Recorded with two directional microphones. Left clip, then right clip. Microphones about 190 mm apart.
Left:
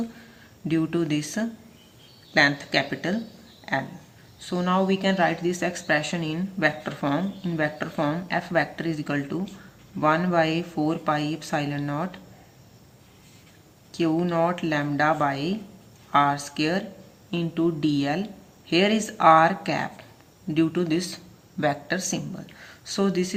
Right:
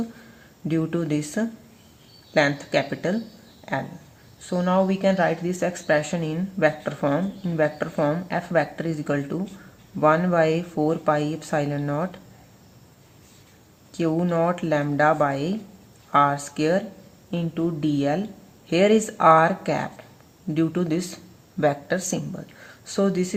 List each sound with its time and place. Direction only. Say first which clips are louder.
0.7 s speech: even; 55° right (ahead or behind)
4.4 s speech: right 2 dB; 50° right (ahead or behind)
13.9 s speech: right 1 dB; 55° right (ahead or behind)